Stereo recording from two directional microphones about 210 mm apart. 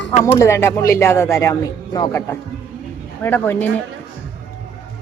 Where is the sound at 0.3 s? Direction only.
15° left (ahead or behind).